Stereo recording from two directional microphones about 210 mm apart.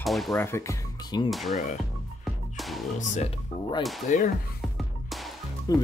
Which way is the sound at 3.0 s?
35° left (ahead or behind).